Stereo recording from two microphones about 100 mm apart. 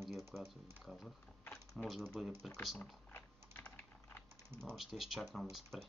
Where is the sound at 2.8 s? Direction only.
20° left (ahead or behind).